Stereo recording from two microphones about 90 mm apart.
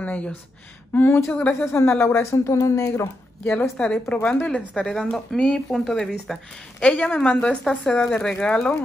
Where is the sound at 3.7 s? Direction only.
10° left (ahead or behind).